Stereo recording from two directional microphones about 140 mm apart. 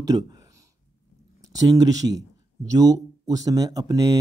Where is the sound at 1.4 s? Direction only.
25° right (ahead or behind).